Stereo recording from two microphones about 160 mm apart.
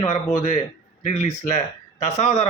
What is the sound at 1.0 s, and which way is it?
A man's voice, 45° left (ahead or behind).